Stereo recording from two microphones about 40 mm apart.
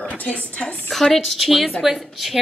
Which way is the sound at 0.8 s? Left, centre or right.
Centre.